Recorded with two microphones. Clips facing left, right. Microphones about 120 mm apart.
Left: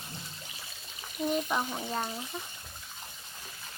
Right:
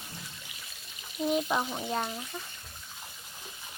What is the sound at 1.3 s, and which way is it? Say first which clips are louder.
Speech: right 2 dB; 5° right (ahead or behind).